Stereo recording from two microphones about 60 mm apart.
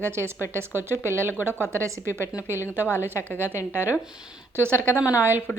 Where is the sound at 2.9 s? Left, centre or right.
Left.